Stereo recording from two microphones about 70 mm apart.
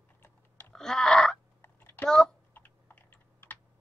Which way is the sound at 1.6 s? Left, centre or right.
Left.